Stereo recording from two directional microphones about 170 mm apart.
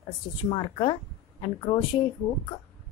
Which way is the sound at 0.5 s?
30° left (ahead or behind).